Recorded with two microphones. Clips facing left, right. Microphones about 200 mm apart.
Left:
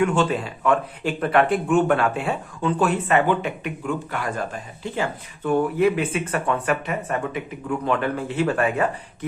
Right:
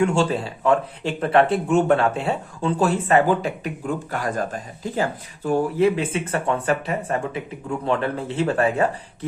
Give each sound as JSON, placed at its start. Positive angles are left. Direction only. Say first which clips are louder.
{"t": 0.0, "sound": "speech", "louder": "right 1 dB", "side_deg": -30}